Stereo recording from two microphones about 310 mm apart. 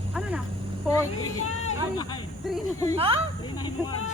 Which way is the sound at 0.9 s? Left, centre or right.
Centre.